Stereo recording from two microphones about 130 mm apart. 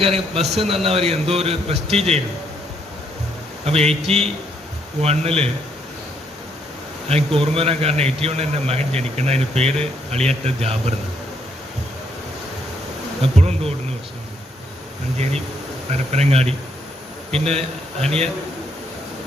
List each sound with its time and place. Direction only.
0.0 s a man's voice: 50° right (ahead or behind)
3.7 s a man's voice: 50° right (ahead or behind)
7.3 s a man's voice: 50° right (ahead or behind)
13.2 s insect: 55° right (ahead or behind)
16.1 s a man's voice: 55° right (ahead or behind)